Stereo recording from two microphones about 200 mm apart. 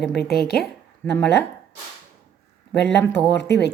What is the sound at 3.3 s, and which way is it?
Speech, 60° left (ahead or behind).